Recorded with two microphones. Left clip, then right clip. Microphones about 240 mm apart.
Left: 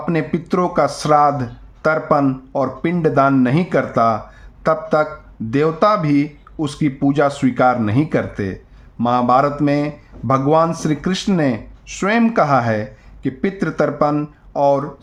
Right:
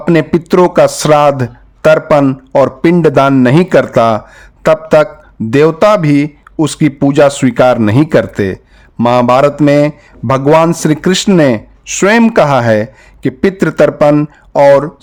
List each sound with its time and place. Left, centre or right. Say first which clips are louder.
0.0 s a man's voice: right 10 dB; right